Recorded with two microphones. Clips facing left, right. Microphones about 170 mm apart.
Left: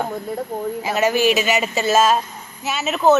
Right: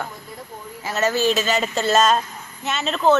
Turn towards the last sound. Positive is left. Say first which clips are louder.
# left 2 dB
turn(degrees=10)  # may be behind; listen again after turning